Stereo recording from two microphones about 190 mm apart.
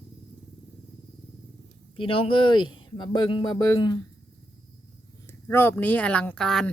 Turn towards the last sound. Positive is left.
turn(degrees=5)  # may be behind; listen again after turning